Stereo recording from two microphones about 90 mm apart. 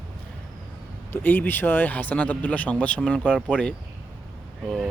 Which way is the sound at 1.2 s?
20° left (ahead or behind).